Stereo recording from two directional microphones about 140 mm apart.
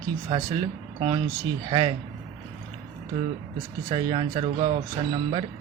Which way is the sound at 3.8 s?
35° right (ahead or behind).